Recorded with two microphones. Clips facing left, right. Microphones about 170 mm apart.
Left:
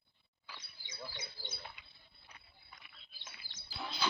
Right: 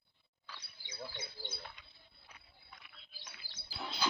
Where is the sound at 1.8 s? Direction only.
5° left (ahead or behind).